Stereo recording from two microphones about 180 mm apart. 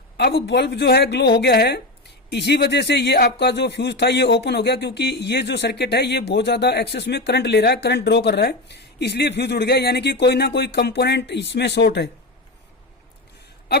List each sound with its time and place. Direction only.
0.2 s speech: 70° left (ahead or behind)